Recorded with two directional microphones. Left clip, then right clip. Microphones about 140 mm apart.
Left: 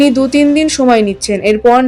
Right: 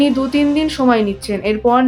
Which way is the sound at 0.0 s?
30° left (ahead or behind).